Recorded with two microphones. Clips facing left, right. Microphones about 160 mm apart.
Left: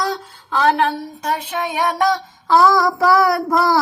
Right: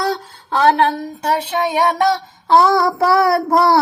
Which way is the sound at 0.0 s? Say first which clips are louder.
Right 2 dB; 30° right (ahead or behind).